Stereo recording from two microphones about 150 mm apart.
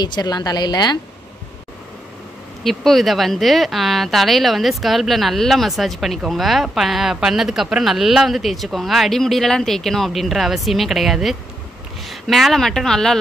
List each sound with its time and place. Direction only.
0.0 s a woman's voice: 30° left (ahead or behind)
2.6 s speech: centre (ahead or behind)